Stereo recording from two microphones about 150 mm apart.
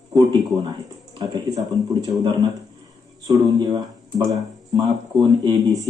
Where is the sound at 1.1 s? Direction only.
25° right (ahead or behind).